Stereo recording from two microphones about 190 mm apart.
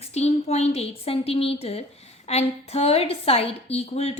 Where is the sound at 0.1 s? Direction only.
35° left (ahead or behind).